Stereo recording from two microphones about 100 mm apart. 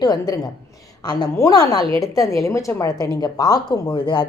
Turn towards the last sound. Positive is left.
turn(degrees=45)  # may be behind; listen again after turning